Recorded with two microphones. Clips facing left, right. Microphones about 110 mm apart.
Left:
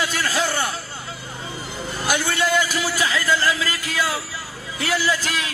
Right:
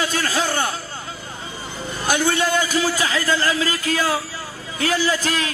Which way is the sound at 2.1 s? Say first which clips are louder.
Right 2 dB; 15° right (ahead or behind).